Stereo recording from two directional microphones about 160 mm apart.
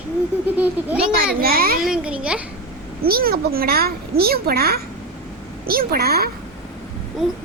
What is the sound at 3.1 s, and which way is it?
A woman's voice, 70° right (ahead or behind).